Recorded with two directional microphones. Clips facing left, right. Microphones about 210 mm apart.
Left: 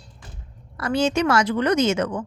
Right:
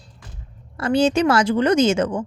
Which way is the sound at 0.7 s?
30° right (ahead or behind).